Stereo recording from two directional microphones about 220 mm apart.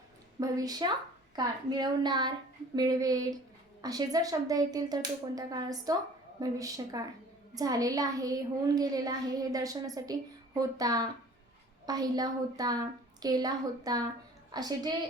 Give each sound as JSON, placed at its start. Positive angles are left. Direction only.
{"t": 0.3, "sound": "a child's voice", "side_deg": -15}